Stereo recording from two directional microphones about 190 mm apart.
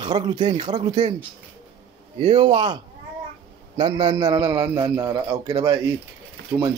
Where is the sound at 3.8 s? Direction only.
20° right (ahead or behind).